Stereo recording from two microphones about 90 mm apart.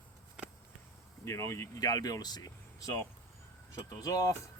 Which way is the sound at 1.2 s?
30° left (ahead or behind).